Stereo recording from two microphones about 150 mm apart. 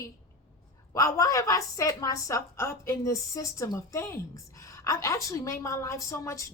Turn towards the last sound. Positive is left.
turn(degrees=20)  # may be behind; listen again after turning